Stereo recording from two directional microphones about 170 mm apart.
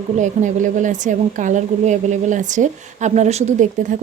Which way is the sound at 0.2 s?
45° right (ahead or behind).